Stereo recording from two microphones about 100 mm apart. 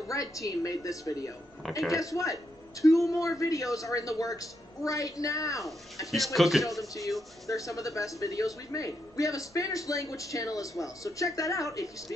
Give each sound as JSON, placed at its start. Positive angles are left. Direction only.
{"t": 0.1, "sound": "speech", "side_deg": 30}
{"t": 6.1, "sound": "a man's voice", "side_deg": 0}
{"t": 7.4, "sound": "speech", "side_deg": 35}